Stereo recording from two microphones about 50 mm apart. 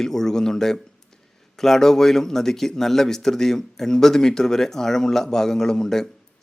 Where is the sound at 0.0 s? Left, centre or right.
Centre.